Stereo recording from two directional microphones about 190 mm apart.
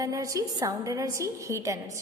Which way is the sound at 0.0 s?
15° right (ahead or behind).